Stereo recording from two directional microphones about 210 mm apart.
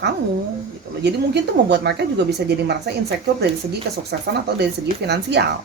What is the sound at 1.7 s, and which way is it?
Speech, 50° right (ahead or behind).